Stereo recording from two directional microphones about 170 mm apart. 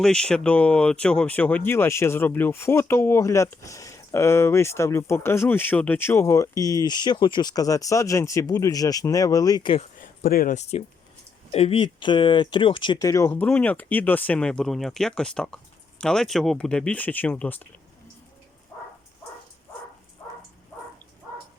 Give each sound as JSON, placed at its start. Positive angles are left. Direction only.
{"t": 0.0, "sound": "speech", "side_deg": 5}
{"t": 10.0, "sound": "speech", "side_deg": 55}